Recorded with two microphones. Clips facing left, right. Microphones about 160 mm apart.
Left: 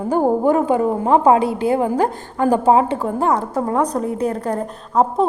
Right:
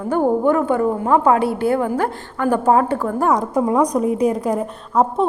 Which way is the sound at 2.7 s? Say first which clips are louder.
Left 1 dB; 20° left (ahead or behind).